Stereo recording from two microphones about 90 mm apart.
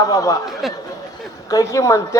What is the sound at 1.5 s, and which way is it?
Speech, 40° left (ahead or behind).